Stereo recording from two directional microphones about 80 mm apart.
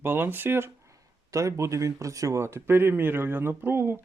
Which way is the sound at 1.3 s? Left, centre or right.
Right.